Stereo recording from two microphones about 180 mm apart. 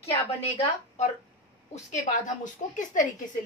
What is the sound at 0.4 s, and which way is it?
A woman's voice, 35° left (ahead or behind).